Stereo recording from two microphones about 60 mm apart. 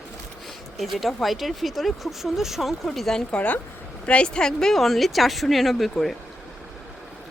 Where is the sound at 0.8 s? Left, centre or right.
Centre.